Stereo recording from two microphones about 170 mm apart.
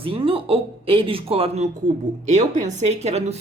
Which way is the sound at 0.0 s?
30° right (ahead or behind).